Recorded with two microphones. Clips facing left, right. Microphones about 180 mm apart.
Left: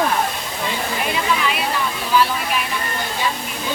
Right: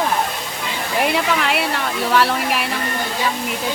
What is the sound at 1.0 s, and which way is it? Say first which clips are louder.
Speech: right 5 dB; 65° right (ahead or behind).